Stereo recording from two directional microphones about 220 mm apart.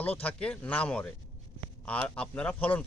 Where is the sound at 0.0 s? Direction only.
5° left (ahead or behind).